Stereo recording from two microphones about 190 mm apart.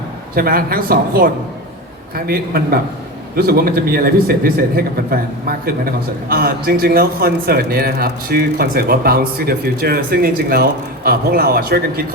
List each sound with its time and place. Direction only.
0.3 s a man's voice: 50° right (ahead or behind)